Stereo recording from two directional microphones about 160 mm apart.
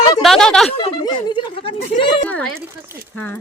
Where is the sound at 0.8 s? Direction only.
30° left (ahead or behind).